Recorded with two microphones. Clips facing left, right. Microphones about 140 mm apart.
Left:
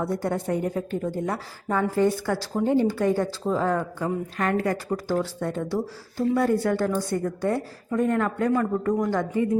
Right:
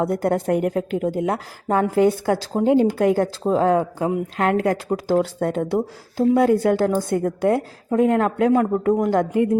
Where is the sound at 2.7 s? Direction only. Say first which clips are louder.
Right 5 dB; 80° right.